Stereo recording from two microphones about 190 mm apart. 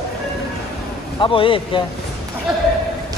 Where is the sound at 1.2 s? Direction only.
25° left (ahead or behind).